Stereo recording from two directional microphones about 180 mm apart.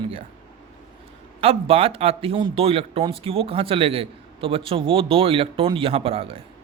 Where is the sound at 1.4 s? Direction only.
30° right (ahead or behind).